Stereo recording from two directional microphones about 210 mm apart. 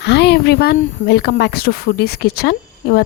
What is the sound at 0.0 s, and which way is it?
Speech, 55° left (ahead or behind).